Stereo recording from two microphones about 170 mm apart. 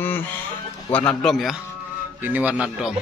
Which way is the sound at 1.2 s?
Centre (ahead or behind).